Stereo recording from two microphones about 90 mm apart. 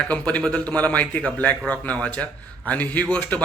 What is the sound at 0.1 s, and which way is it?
A man's voice, 15° left (ahead or behind).